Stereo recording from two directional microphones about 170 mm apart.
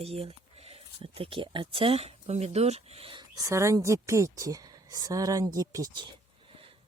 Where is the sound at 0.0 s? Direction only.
35° right (ahead or behind).